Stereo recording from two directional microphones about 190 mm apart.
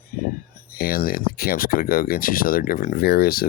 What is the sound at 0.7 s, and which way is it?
Speech, 50° left (ahead or behind).